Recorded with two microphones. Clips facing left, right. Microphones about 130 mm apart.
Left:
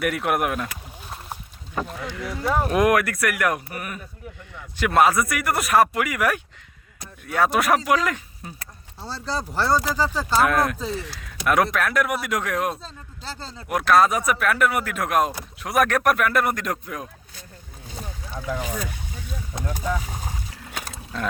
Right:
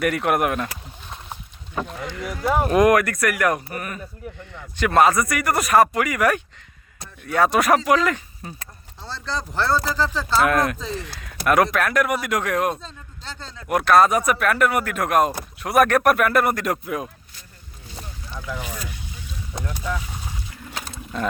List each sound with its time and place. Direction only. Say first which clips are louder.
0.0 s speech: right 2 dB; centre (ahead or behind)
13.4 s speech: left 1 dB; 35° left (ahead or behind)
13.7 s speech: right 2 dB; centre (ahead or behind)
18.6 s a sound: left 4 dB; 50° left (ahead or behind)
20.1 s boat: left 2 dB; 45° left (ahead or behind)
20.9 s a sound: right 4 dB; centre (ahead or behind)